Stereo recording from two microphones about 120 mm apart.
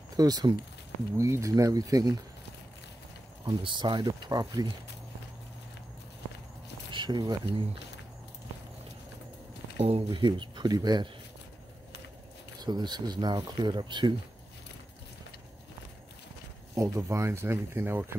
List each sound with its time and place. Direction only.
0.2 s speech: 35° right (ahead or behind)
3.4 s speech: 40° right (ahead or behind)
6.9 s speech: 40° right (ahead or behind)
9.8 s speech: 50° right (ahead or behind); by 11.1 s 35° right (ahead or behind)
12.6 s speech: 35° right (ahead or behind)
16.7 s speech: 25° right (ahead or behind)